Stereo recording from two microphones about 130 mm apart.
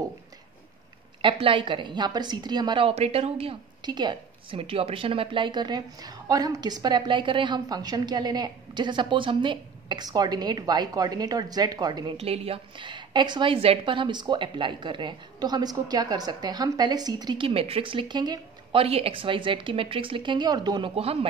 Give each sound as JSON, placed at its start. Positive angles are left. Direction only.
{"t": 1.2, "sound": "a woman's voice", "side_deg": -40}
{"t": 2.9, "sound": "speech", "side_deg": -50}
{"t": 3.8, "sound": "a woman's voice", "side_deg": -35}
{"t": 12.2, "sound": "a woman's voice", "side_deg": -50}
{"t": 18.8, "sound": "a woman's voice", "side_deg": -45}
{"t": 20.9, "sound": "speech", "side_deg": -50}